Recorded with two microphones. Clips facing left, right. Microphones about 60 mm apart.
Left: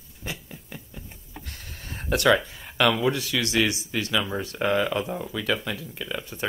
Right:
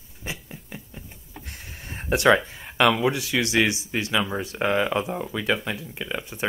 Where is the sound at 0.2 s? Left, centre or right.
Centre.